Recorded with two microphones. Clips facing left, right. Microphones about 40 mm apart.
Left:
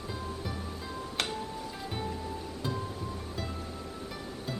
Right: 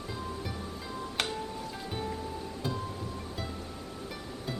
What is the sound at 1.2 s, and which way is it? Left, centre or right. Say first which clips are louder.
Music: right 1 dB; centre.